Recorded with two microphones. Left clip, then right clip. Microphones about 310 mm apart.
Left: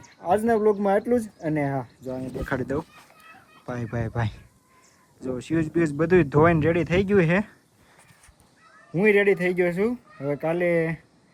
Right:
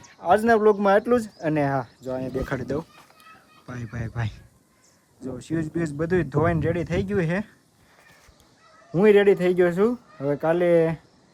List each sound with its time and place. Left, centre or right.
0.2 s speech: centre
9.0 s speech: centre